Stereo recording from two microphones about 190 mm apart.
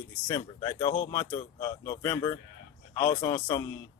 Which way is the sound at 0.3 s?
20° left (ahead or behind).